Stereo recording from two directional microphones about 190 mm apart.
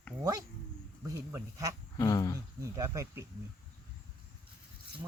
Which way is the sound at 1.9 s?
20° left (ahead or behind).